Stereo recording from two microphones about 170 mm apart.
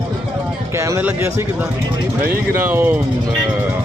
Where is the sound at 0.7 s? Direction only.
15° right (ahead or behind).